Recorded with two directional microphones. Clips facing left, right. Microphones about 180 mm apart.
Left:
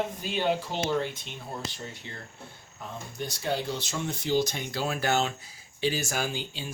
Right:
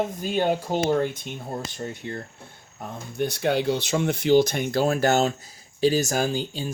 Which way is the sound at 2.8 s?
60° right (ahead or behind).